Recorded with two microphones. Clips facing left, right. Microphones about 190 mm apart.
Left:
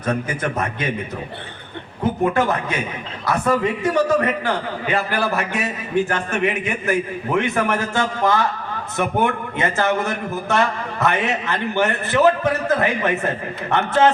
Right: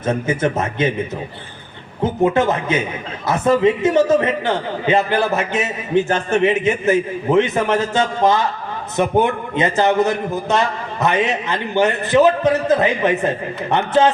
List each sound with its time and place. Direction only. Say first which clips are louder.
0.0 s a man's voice: right 4 dB; 25° right (ahead or behind)
2.2 s a man's voice: right 4 dB; 20° right (ahead or behind)